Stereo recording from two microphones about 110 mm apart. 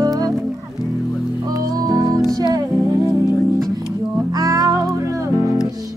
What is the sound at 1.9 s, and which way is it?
Music, 35° right (ahead or behind).